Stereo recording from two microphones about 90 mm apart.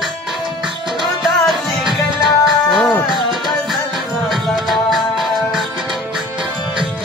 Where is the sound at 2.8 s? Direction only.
20° left (ahead or behind).